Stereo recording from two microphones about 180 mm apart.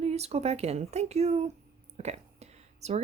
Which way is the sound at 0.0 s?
35° right (ahead or behind).